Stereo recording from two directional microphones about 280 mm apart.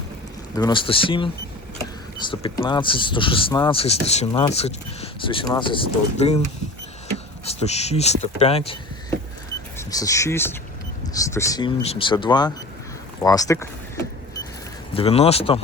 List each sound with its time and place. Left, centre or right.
0.5 s speech: centre
7.4 s speech: left
14.9 s speech: left